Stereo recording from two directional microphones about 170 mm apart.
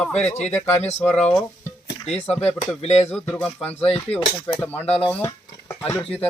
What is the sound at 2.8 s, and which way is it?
Speech, 40° left (ahead or behind).